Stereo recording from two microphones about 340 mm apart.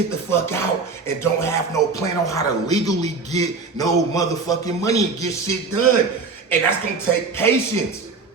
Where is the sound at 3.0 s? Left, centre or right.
Centre.